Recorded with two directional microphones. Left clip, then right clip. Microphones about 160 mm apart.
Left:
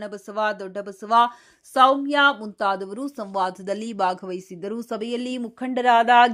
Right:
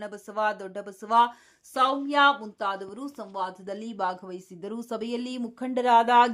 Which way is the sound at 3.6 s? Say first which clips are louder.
Left 7 dB; 25° left (ahead or behind).